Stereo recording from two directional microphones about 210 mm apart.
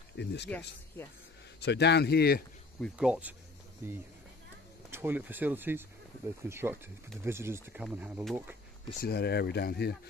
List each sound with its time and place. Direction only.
0.2 s speech: 55° left (ahead or behind)
1.6 s speech: 55° left (ahead or behind)
2.8 s speech: 5° right (ahead or behind)
9.0 s speech: 50° left (ahead or behind)